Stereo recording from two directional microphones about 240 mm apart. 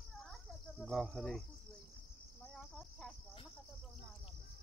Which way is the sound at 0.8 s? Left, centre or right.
Centre.